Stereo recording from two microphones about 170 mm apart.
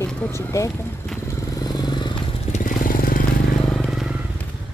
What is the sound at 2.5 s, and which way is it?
Vehicle, 55° left (ahead or behind).